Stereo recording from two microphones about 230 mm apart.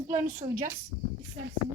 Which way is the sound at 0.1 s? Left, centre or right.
Right.